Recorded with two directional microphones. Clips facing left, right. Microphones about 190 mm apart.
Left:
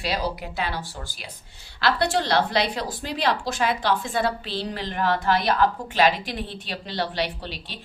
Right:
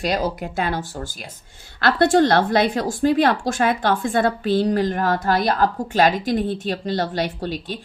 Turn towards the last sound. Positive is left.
turn(degrees=-45)  # may be behind; listen again after turning